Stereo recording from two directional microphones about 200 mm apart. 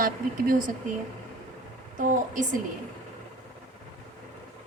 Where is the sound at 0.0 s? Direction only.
45° right (ahead or behind).